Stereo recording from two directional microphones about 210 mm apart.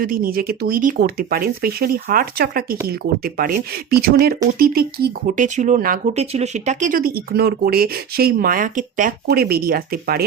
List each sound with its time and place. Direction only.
0.0 s speech: 45° right (ahead or behind)